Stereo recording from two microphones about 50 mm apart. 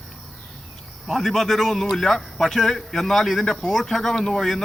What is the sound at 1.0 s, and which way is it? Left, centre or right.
A man's voice, centre.